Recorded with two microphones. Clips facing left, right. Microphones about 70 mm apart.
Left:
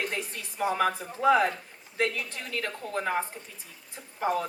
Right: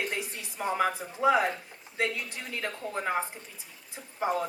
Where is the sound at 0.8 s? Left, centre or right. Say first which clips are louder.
Left 1 dB; centre.